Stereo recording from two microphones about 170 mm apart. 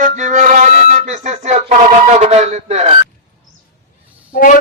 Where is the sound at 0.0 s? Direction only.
50° right (ahead or behind).